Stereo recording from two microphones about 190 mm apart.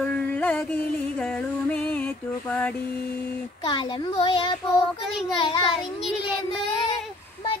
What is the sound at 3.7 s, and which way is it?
A child's voice, 25° left (ahead or behind).